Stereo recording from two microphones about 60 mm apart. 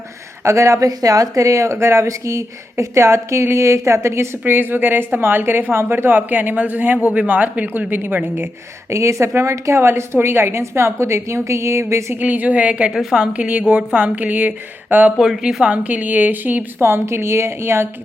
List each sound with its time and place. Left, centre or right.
0.4 s speech: right
8.9 s a woman's voice: right
12.2 s a woman's voice: right
12.9 s a woman's voice: centre
13.1 s a woman's voice: centre
15.2 s a woman's voice: centre
15.7 s a woman's voice: right
16.8 s a woman's voice: right